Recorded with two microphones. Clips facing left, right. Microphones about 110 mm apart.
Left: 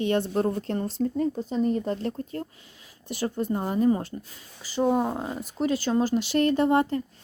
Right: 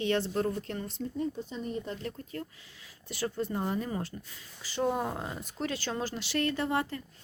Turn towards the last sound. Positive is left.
turn(degrees=25)  # may be behind; listen again after turning